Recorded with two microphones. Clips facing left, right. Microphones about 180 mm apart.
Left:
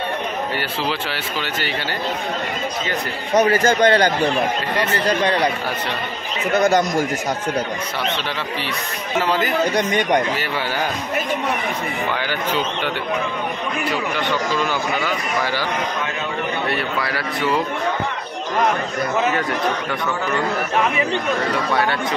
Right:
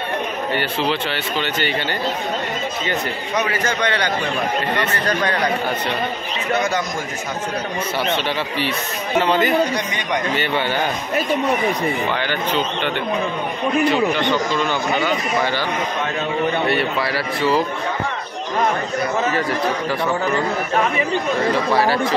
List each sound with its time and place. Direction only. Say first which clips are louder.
0.6 s speech: right 3 dB; 5° left (ahead or behind)
3.3 s a man's voice: left 7 dB; 40° left (ahead or behind)
9.2 s speech: right 2 dB; centre (ahead or behind)
9.8 s speech: left 5 dB; 50° left (ahead or behind)
10.3 s speech: right 3 dB; 5° left (ahead or behind)
12.2 s speech: right 1 dB; 10° left (ahead or behind)